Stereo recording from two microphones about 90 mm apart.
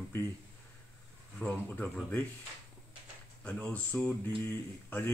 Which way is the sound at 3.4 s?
15° left (ahead or behind).